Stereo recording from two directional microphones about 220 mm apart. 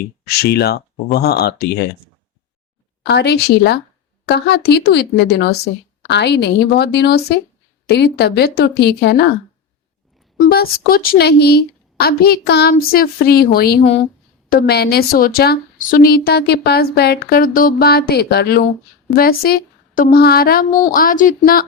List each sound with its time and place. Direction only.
0.0 s a woman's voice: 45° left (ahead or behind)
3.1 s a woman's voice: 50° left (ahead or behind)
10.3 s a woman's voice: 45° left (ahead or behind)